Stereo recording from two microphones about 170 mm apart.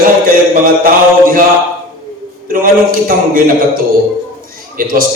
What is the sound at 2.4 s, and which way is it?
A man's voice, 55° right (ahead or behind).